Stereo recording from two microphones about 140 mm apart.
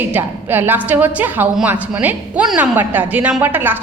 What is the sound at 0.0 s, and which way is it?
A woman's voice, 15° right (ahead or behind).